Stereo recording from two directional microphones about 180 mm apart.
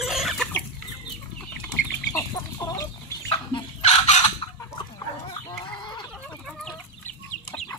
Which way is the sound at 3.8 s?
40° left (ahead or behind).